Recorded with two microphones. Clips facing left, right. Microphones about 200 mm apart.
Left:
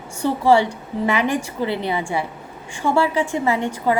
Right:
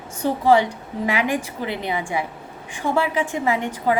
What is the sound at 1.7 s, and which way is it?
A woman's voice, 15° right (ahead or behind).